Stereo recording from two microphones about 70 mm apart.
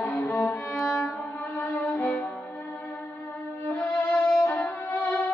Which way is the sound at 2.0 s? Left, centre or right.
Left.